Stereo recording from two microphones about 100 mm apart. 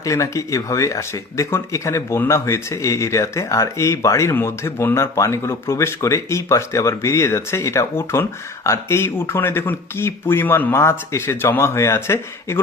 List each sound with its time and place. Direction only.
0.0 s speech: 30° left (ahead or behind)